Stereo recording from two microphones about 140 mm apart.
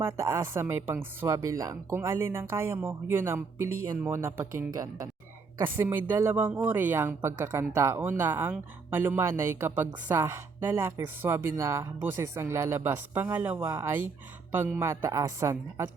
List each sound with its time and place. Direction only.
0.0 s speech: 20° right (ahead or behind)